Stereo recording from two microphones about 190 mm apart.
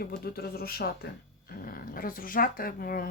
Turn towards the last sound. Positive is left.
turn(degrees=50)  # may be behind; listen again after turning